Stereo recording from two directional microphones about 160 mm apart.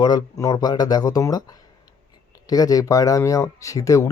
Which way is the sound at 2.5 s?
25° left (ahead or behind).